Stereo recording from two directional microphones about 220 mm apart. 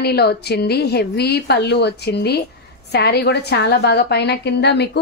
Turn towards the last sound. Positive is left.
turn(degrees=50)  # may be behind; listen again after turning